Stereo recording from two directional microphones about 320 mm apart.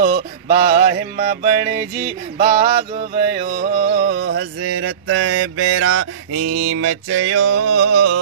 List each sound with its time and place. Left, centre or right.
0.0 s mantra: right
2.3 s music: right
3.3 s mantra: right
6.5 s music: right